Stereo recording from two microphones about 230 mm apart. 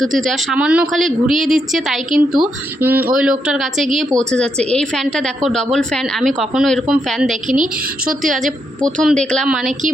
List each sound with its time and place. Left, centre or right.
0.0 s a woman's voice: centre
7.4 s a woman's voice: right
9.0 s a woman's voice: centre